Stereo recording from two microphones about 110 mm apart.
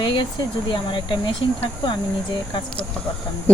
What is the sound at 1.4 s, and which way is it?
Speech, 45° left (ahead or behind).